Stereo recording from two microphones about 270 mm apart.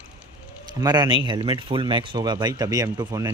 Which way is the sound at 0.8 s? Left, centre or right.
Centre.